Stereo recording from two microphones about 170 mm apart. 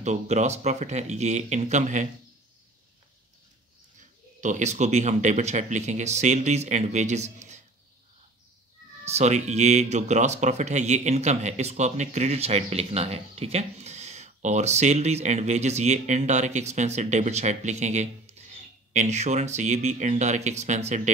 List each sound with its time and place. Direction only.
0.0 s speech: 45° right (ahead or behind)
4.4 s speech: 45° right (ahead or behind)
9.0 s speech: 40° right (ahead or behind)